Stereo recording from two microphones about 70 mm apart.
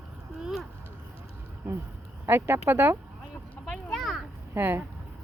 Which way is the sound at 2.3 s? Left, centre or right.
Right.